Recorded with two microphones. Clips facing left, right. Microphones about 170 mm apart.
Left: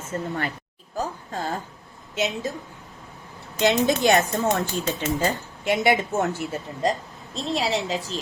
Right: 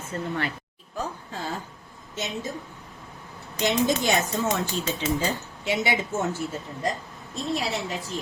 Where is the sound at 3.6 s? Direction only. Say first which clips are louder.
Left 4 dB; 60° left (ahead or behind).